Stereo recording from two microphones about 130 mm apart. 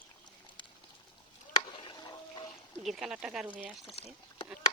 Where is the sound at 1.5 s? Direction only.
40° left (ahead or behind).